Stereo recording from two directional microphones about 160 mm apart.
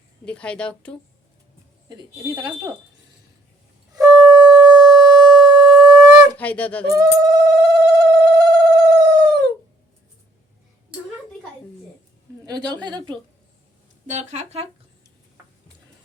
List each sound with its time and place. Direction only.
0.3 s a woman's voice: 5° left (ahead or behind)
1.9 s a woman's voice: 25° right (ahead or behind)
3.9 s wind instrument: 25° right (ahead or behind)
4.9 s siren: 25° right (ahead or behind)
6.3 s a woman's voice: 10° left (ahead or behind)
6.9 s a sound: 25° right (ahead or behind)
12.5 s a woman's voice: 25° right (ahead or behind)
14.1 s speech: 45° right (ahead or behind)